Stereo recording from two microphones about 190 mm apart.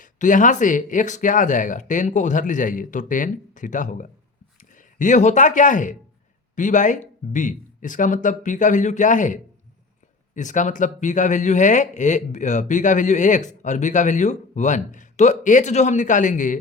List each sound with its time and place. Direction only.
0.0 s speech: 40° left (ahead or behind)